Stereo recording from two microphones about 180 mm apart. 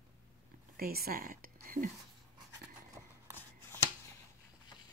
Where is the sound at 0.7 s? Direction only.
55° right (ahead or behind).